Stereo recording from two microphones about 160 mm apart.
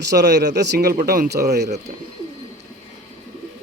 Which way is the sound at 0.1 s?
90° right.